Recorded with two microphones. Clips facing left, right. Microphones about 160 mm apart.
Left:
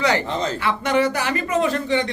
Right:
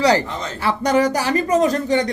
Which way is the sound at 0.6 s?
40° right (ahead or behind).